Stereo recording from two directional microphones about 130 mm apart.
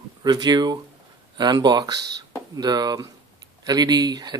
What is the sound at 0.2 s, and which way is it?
Speech, 35° right (ahead or behind).